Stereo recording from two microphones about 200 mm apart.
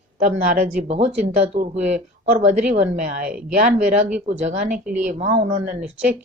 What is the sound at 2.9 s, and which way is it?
Speech, 40° right (ahead or behind).